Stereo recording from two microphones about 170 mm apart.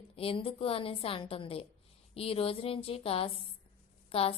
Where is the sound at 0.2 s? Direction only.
35° left (ahead or behind).